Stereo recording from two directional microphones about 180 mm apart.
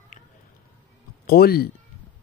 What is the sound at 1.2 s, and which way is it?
Speech, 60° left (ahead or behind).